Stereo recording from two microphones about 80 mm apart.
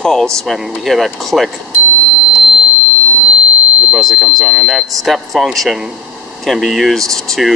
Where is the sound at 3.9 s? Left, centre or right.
Centre.